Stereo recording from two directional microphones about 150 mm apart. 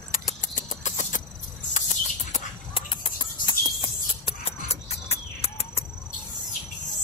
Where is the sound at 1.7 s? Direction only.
50° left (ahead or behind).